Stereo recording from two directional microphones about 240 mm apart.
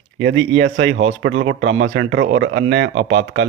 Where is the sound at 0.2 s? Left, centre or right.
Right.